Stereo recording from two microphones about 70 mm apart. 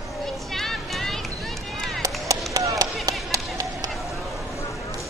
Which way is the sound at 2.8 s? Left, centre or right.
Right.